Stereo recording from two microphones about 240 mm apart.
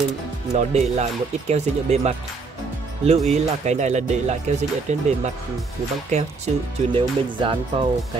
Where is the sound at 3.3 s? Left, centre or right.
Right.